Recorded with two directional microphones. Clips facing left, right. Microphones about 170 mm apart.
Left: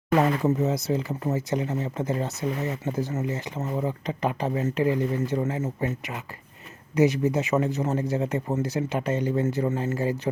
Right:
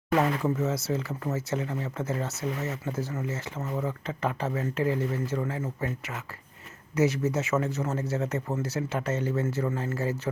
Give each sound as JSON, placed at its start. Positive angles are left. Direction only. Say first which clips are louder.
{"t": 0.1, "sound": "speech", "louder": "left 3 dB", "side_deg": 15}